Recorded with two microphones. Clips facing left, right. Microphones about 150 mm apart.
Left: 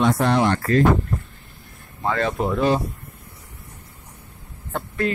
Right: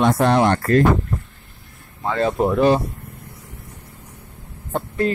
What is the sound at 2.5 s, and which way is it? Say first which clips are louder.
Speech: right 4 dB; 60° right (ahead or behind).